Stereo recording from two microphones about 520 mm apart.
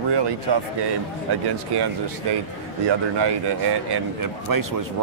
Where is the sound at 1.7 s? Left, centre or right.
Right.